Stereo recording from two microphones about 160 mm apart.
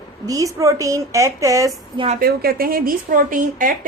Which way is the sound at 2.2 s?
70° right (ahead or behind).